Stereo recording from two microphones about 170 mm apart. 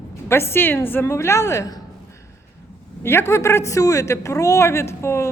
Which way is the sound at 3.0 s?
15° left (ahead or behind).